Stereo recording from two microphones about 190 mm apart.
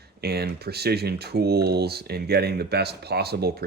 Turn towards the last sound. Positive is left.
turn(degrees=-55)  # may be behind; listen again after turning